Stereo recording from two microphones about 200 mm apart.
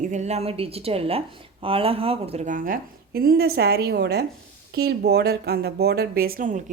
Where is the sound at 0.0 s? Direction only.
35° right (ahead or behind).